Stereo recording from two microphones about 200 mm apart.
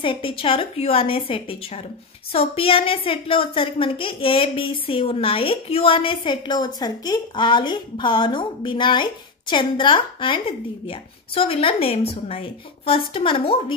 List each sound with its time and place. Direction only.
0.0 s a woman's voice: 25° left (ahead or behind)